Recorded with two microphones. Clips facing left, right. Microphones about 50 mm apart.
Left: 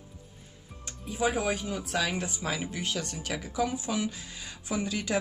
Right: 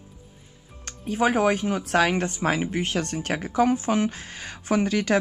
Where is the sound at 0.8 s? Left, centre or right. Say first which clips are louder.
Right 6 dB; right.